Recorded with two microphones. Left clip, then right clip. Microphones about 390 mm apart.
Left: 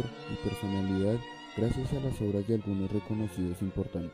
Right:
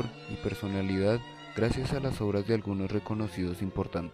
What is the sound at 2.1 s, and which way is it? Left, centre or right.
Speech, right.